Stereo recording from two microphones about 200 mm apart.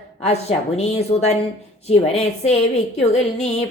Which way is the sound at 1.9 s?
30° left (ahead or behind).